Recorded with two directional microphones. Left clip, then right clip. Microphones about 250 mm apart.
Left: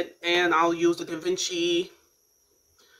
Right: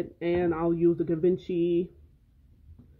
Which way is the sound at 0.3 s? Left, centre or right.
Centre.